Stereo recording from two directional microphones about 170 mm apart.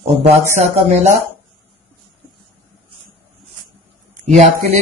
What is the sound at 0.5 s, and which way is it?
Speech, 40° right (ahead or behind).